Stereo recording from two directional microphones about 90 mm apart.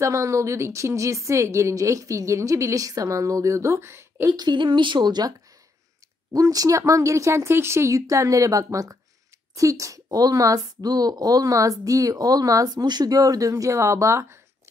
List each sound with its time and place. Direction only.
0.0 s a woman's voice: 35° right (ahead or behind)
4.3 s a woman's voice: 60° right (ahead or behind)
6.3 s a woman's voice: 40° right (ahead or behind)